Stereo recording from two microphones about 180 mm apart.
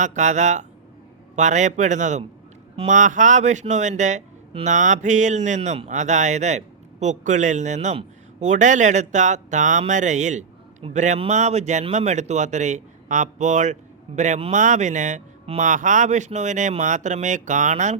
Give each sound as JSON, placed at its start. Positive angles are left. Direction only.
{"t": 0.0, "sound": "a man's voice", "side_deg": -40}